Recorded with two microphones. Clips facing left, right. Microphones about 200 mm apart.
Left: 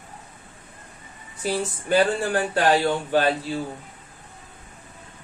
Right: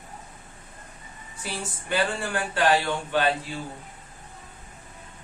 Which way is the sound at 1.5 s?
40° left (ahead or behind).